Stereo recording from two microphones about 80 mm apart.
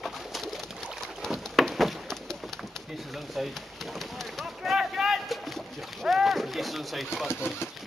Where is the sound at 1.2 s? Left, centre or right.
Centre.